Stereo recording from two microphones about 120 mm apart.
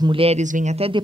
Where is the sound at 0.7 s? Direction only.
50° right (ahead or behind).